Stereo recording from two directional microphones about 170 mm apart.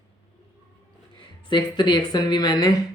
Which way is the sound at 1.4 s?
25° left (ahead or behind).